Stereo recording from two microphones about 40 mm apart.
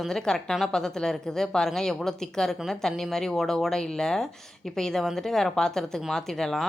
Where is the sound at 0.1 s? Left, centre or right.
Centre.